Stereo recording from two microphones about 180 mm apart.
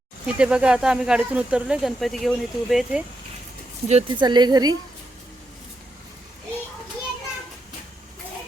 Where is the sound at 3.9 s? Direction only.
35° right (ahead or behind).